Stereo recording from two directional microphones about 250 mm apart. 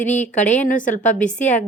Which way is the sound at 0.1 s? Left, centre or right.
Left.